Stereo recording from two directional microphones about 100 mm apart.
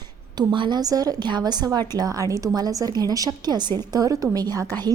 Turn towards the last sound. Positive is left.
turn(degrees=-40)  # may be behind; listen again after turning